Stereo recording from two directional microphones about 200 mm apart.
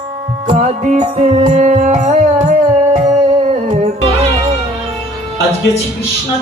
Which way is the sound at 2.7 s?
15° right (ahead or behind).